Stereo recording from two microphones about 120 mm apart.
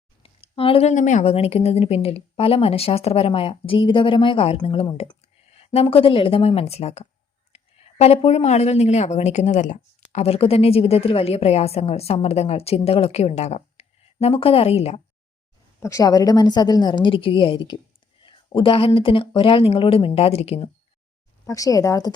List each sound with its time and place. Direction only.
0.2 s a sound: 50° left (ahead or behind)
0.9 s a woman's voice: 90° left; by 15.0 s 60° left (ahead or behind)
15.8 s a woman's voice: 30° left (ahead or behind)
18.2 s a sound: 40° left (ahead or behind)
18.9 s a woman's voice: 50° left (ahead or behind)
21.4 s speech: 25° left (ahead or behind)